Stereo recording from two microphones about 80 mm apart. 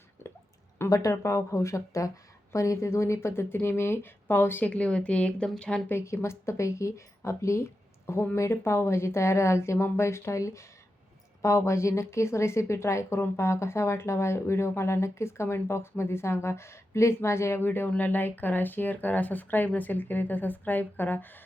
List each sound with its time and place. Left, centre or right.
0.9 s speech: left
4.7 s speech: centre
5.9 s speech: left